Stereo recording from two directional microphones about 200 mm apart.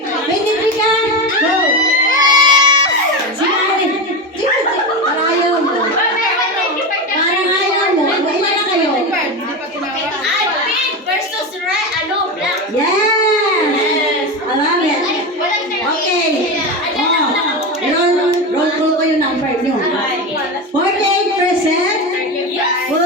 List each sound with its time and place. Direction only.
2.0 s crowd: 20° right (ahead or behind)